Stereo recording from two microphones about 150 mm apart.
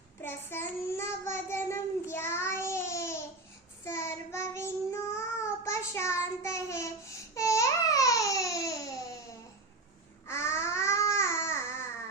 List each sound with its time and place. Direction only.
0.2 s child singing: 15° left (ahead or behind)
7.3 s babbling: 20° left (ahead or behind)
10.2 s babbling: 15° left (ahead or behind)